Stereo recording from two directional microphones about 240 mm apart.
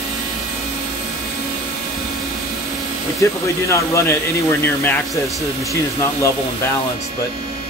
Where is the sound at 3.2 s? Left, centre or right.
Centre.